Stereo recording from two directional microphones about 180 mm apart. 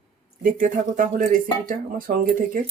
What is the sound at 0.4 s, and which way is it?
Speech, 50° right (ahead or behind).